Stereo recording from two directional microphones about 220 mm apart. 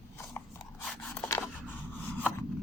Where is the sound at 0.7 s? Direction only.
5° left (ahead or behind).